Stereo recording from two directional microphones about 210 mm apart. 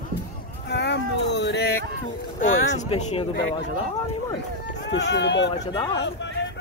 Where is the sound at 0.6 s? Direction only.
55° left (ahead or behind).